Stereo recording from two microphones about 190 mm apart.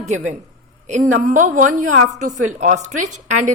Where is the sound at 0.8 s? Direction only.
40° right (ahead or behind).